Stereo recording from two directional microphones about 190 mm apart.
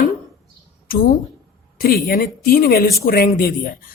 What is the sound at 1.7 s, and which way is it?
Speech, 50° left (ahead or behind).